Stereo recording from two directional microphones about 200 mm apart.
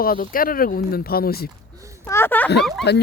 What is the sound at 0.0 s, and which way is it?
Speech, 45° left (ahead or behind).